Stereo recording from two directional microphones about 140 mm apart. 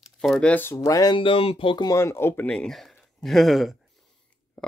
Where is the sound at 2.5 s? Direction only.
5° left (ahead or behind).